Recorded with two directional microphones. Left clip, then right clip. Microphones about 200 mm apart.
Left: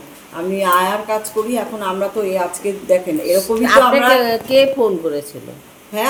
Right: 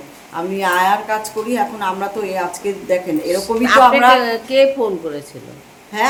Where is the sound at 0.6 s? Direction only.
15° right (ahead or behind).